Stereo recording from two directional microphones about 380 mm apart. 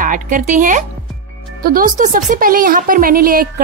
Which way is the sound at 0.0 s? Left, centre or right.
Right.